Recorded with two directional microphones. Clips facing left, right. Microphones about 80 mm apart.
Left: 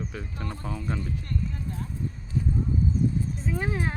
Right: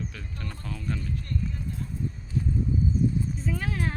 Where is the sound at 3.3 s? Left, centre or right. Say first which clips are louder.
Left 1 dB; left.